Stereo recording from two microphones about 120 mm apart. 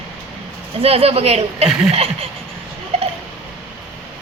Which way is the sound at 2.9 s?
60° right (ahead or behind).